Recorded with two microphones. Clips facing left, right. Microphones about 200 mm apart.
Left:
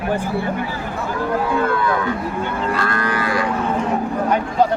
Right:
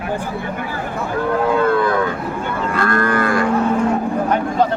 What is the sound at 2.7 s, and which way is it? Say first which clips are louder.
Cattle: right 4 dB; 50° right (ahead or behind).